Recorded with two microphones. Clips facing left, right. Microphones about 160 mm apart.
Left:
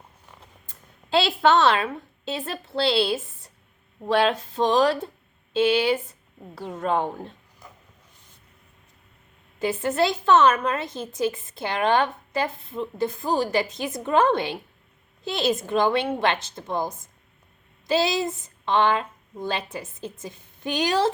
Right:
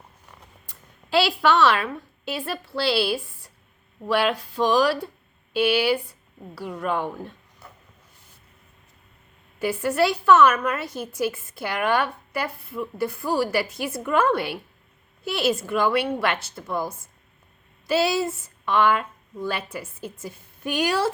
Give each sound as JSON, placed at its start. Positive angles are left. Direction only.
{"t": 1.1, "sound": "a woman's voice", "side_deg": 20}
{"t": 9.6, "sound": "a woman's voice", "side_deg": 20}